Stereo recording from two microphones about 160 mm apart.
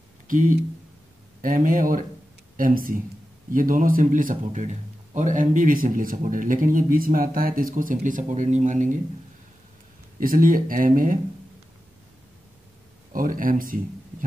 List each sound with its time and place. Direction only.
0.3 s a man's voice: 55° right (ahead or behind)
10.2 s a man's voice: 60° right (ahead or behind)
13.1 s a man's voice: 60° right (ahead or behind)